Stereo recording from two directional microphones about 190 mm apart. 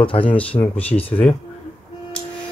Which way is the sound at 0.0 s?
25° left (ahead or behind).